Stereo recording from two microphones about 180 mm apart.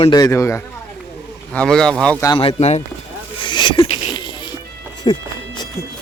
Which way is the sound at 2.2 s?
25° left (ahead or behind).